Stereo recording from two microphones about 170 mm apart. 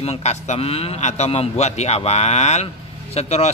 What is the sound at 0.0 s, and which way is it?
A man's voice, 40° left (ahead or behind).